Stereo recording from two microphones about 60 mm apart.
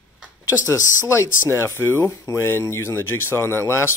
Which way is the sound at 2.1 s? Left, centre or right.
Left.